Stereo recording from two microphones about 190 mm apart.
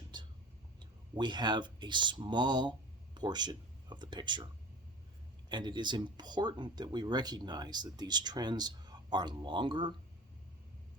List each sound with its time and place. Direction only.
0.1 s whispering: 25° right (ahead or behind)
0.8 s speech: 25° right (ahead or behind)
5.5 s speech: 25° right (ahead or behind)